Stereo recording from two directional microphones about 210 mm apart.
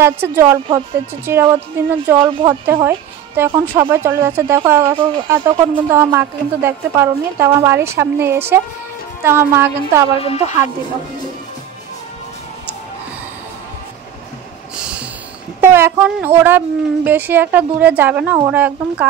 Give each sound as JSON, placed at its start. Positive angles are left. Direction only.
{"t": 0.0, "sound": "speech", "side_deg": -10}
{"t": 10.0, "sound": "a woman's voice", "side_deg": 25}
{"t": 14.8, "sound": "a sound", "side_deg": -5}
{"t": 15.6, "sound": "speech", "side_deg": -10}